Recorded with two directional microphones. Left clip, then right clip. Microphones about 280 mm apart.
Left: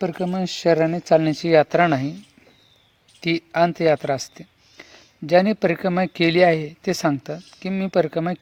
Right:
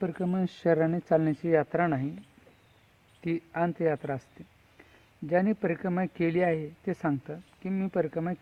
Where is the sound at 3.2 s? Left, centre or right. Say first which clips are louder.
Left 11 dB; left.